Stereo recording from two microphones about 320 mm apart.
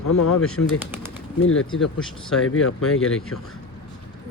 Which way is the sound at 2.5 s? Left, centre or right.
Left.